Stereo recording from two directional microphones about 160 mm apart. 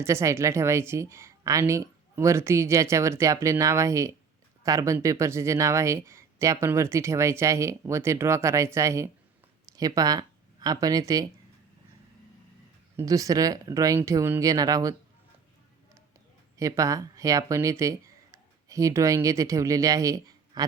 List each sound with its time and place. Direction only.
0.0 s speech: 15° right (ahead or behind)
13.0 s speech: 20° right (ahead or behind)
16.6 s speech: 20° right (ahead or behind)